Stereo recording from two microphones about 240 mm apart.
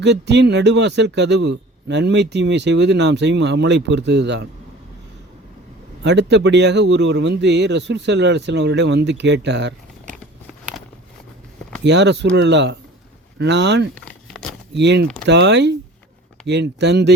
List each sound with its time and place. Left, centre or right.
0.0 s a man's voice: right
6.0 s a man's voice: right
11.8 s a man's voice: right
13.9 s a sound: centre
14.7 s a man's voice: right